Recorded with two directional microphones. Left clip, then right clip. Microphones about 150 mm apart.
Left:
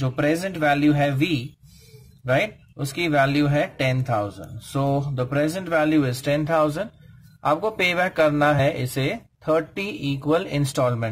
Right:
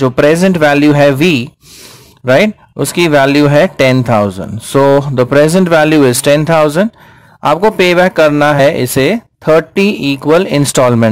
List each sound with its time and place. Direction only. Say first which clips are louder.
0.0 s speech: right 15 dB; 55° right (ahead or behind)